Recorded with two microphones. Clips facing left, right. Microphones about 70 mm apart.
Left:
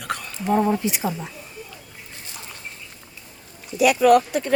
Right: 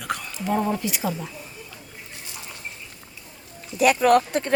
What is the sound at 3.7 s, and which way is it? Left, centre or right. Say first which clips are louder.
Speech: left 2 dB; right.